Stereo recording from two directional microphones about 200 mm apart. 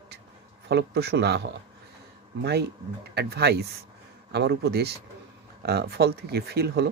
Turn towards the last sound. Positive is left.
turn(degrees=-55)  # may be behind; listen again after turning